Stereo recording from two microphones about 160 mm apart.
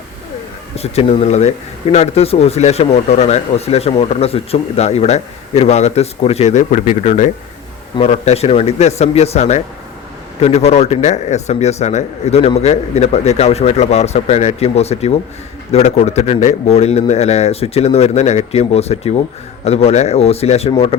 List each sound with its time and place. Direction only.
0.8 s a man's voice: 40° left (ahead or behind)